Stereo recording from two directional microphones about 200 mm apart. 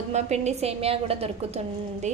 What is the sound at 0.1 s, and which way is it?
A woman's voice, 35° right (ahead or behind).